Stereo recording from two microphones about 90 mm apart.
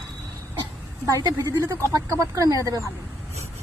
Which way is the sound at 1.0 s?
40° right (ahead or behind).